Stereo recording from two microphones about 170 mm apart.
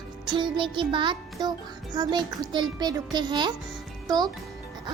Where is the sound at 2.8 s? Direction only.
20° right (ahead or behind).